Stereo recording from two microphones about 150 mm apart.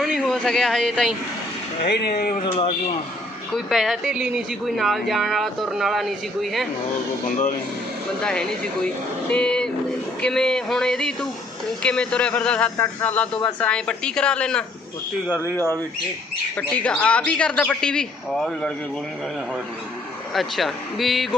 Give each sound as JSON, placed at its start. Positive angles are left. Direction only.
{"t": 0.2, "sound": "speech", "side_deg": 5}
{"t": 1.8, "sound": "speech", "side_deg": 90}
{"t": 2.4, "sound": "speech", "side_deg": 35}
{"t": 3.5, "sound": "speech", "side_deg": 0}
{"t": 8.2, "sound": "speech", "side_deg": 5}
{"t": 15.4, "sound": "speech", "side_deg": 20}
{"t": 20.3, "sound": "speech", "side_deg": 0}